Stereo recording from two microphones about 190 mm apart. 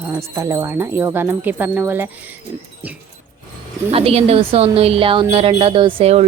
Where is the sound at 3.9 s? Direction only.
30° right (ahead or behind).